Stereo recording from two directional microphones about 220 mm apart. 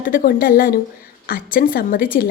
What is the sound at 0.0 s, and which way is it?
A woman's voice, 40° left (ahead or behind).